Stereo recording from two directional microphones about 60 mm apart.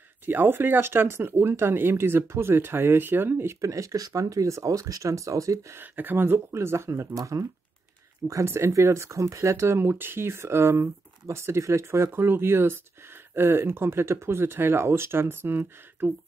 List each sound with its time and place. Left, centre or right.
0.2 s speech: right
3.6 s speech: right
5.8 s speech: right
7.2 s speech: right
8.5 s speech: right
9.9 s speech: right